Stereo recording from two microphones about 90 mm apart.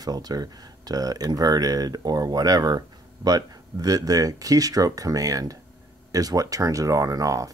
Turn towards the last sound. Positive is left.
turn(degrees=-40)  # may be behind; listen again after turning